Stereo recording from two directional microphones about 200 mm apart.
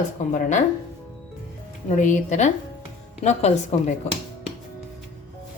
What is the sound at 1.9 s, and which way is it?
A woman's voice, 40° left (ahead or behind).